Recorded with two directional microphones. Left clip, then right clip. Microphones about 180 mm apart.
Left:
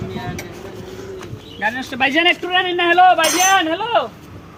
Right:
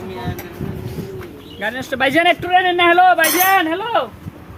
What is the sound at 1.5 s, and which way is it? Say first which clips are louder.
Speech: left 1 dB; 25° right (ahead or behind).